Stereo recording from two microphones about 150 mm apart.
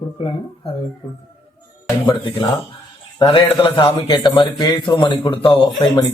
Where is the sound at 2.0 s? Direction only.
30° left (ahead or behind).